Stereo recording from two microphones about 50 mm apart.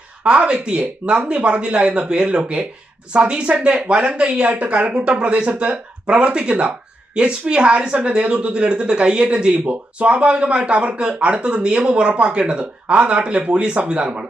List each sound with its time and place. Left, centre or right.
0.3 s speech: right